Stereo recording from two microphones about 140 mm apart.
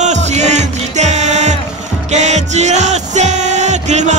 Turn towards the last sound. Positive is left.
turn(degrees=-55)  # may be behind; listen again after turning